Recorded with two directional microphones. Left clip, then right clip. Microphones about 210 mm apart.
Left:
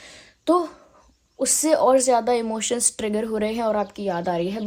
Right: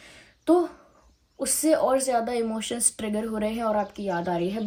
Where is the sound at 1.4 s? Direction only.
45° left (ahead or behind).